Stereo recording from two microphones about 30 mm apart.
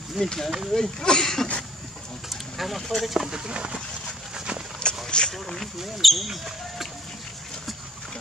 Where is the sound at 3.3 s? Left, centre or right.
Right.